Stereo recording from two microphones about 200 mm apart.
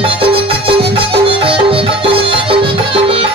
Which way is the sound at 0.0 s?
25° right (ahead or behind).